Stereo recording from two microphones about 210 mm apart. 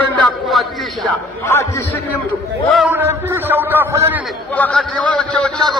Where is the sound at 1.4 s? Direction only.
10° left (ahead or behind).